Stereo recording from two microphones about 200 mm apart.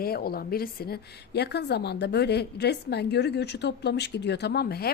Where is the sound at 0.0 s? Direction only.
50° left (ahead or behind).